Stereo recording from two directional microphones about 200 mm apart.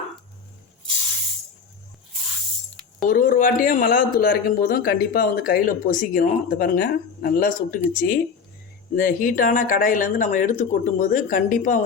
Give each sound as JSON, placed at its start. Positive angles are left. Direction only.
{"t": 3.0, "sound": "speech", "side_deg": 45}